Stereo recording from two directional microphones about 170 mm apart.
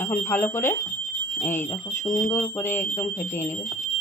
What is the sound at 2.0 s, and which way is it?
Speech, 15° left (ahead or behind).